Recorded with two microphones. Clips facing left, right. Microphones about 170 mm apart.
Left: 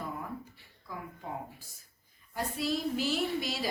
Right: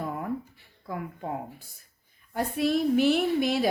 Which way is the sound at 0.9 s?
60° right (ahead or behind).